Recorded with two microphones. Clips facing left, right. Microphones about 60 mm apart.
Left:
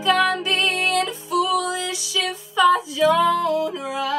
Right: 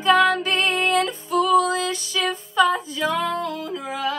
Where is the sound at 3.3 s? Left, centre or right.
Right.